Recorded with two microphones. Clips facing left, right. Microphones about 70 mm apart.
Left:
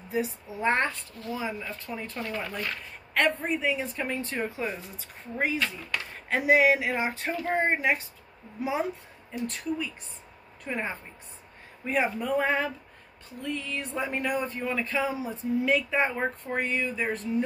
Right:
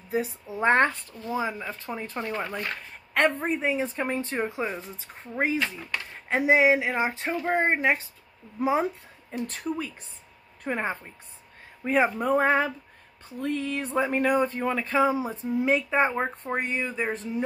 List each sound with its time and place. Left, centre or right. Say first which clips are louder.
0.1 s speech: right 2 dB; right
9.5 s a woman's voice: right 1 dB; right
11.8 s speech: right 4 dB; right
12.2 s speech: right 4 dB; right